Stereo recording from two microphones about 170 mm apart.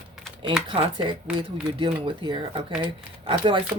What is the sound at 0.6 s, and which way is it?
Speech, 30° right (ahead or behind).